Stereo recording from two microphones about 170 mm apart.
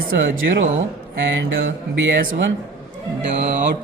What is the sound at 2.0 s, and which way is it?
Speech, 65° right (ahead or behind).